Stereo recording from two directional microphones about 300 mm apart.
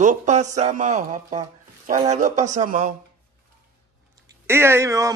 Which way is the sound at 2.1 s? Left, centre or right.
Right.